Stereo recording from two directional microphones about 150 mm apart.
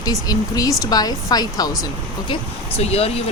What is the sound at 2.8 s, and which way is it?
Speech, 45° left (ahead or behind).